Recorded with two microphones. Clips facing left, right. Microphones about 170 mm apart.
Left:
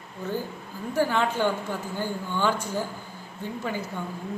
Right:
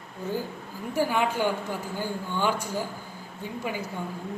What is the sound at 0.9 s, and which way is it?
A man's voice, 10° right (ahead or behind).